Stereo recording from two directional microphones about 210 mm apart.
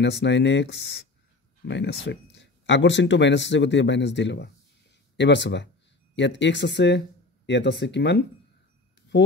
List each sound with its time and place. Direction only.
0.0 s speech: 55° left (ahead or behind)